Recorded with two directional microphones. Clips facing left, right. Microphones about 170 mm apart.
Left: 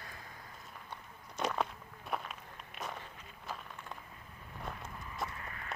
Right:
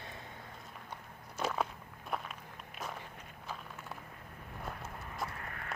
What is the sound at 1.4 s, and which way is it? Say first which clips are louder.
Walk: even; 5° right (ahead or behind).